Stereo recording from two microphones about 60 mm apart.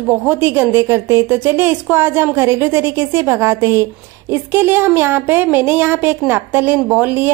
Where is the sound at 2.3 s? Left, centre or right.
Right.